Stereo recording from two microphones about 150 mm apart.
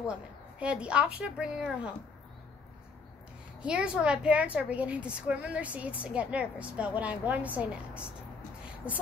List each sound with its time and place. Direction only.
0.0 s a woman's voice: 5° right (ahead or behind)
3.6 s a woman's voice: 5° right (ahead or behind)